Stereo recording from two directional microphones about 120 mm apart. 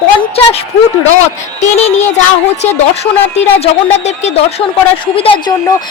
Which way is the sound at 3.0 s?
60° left (ahead or behind).